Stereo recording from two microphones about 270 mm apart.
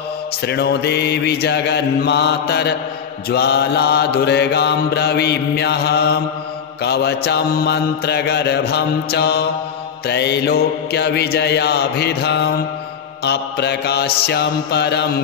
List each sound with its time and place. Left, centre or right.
0.4 s mantra: left